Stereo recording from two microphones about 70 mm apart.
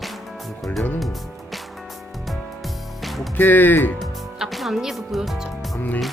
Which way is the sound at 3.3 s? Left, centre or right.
Left.